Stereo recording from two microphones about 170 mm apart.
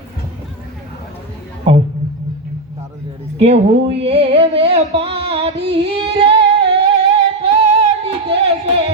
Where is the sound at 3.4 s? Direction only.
35° right (ahead or behind).